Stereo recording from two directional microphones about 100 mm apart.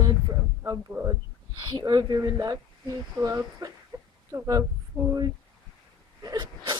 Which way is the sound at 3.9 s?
40° right (ahead or behind).